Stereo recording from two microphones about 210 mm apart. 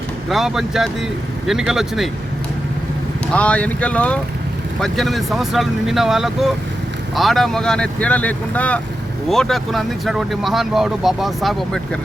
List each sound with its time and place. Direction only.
0.3 s speech: centre (ahead or behind)
3.3 s speech: 5° left (ahead or behind)